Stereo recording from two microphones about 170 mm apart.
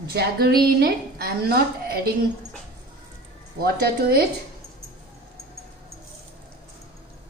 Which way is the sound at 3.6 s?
65° right (ahead or behind).